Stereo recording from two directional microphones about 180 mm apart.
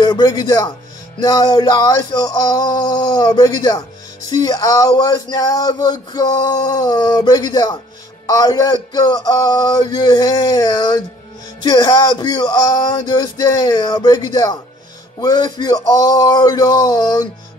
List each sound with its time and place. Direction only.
0.0 s a man's voice: 20° left (ahead or behind)